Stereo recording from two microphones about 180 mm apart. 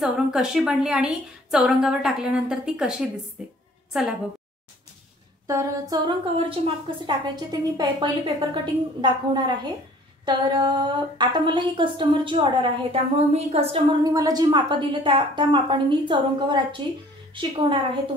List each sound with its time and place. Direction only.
0.0 s a woman's voice: 5° right (ahead or behind)
5.5 s a sound: 15° right (ahead or behind)
6.0 s a woman's voice: 30° right (ahead or behind)
14.0 s a woman's voice: 20° right (ahead or behind)